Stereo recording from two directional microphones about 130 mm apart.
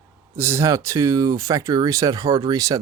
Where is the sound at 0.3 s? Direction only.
20° right (ahead or behind).